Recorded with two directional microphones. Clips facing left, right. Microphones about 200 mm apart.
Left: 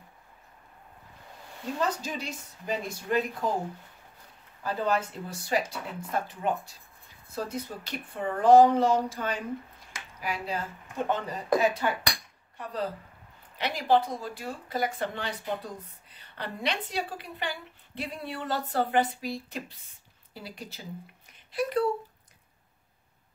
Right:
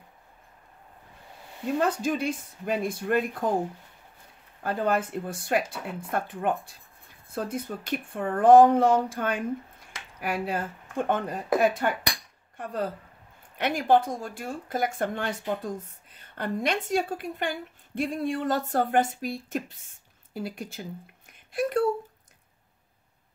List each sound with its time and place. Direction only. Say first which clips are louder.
1.8 s speech: right 5 dB; 55° right (ahead or behind)
4.6 s speech: right 2 dB; 55° right (ahead or behind)